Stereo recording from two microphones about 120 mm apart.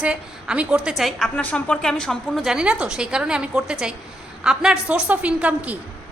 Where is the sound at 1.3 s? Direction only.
15° left (ahead or behind); by 5.7 s 10° right (ahead or behind).